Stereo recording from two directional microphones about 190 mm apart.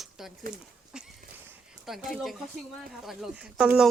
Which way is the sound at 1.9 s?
Centre (ahead or behind).